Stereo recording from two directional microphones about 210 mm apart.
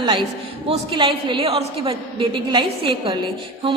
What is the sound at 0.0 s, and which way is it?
A woman's voice, 20° right (ahead or behind).